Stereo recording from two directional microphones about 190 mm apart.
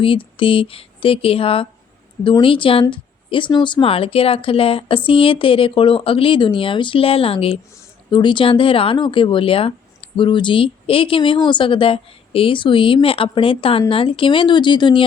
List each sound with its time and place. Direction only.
0.0 s speech: 30° left (ahead or behind)